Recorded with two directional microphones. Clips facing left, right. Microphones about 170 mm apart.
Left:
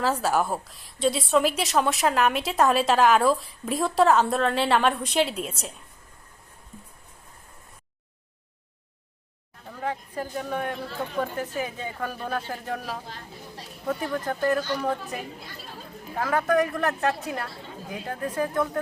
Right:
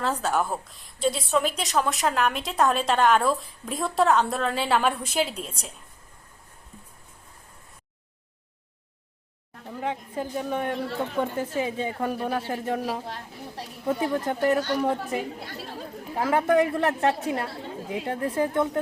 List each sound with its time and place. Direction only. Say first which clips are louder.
0.0 s a woman's voice: left 2 dB; 5° left (ahead or behind)
9.6 s a woman's voice: right 1 dB; 20° right (ahead or behind)
12.1 s a woman's voice: right 3 dB; 15° right (ahead or behind)
15.4 s speech: right 5 dB; 70° right (ahead or behind)
16.1 s a woman's voice: right 2 dB; 25° right (ahead or behind)